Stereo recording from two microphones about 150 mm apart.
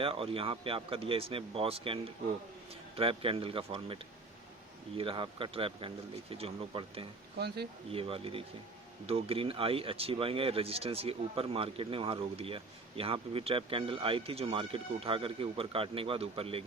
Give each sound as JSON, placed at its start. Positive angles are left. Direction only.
{"t": 0.0, "sound": "speech", "side_deg": -40}
{"t": 7.3, "sound": "speech", "side_deg": -90}
{"t": 7.9, "sound": "speech", "side_deg": -40}